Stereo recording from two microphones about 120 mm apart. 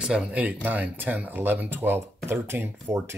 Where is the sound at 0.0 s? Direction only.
5° right (ahead or behind).